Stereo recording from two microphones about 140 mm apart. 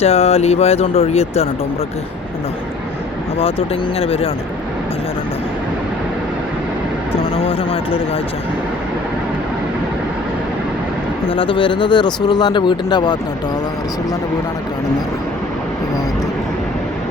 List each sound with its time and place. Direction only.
0.0 s speech: 45° left (ahead or behind)
3.9 s speech: 45° left (ahead or behind)
7.2 s speech: 40° left (ahead or behind)
11.3 s speech: 40° left (ahead or behind)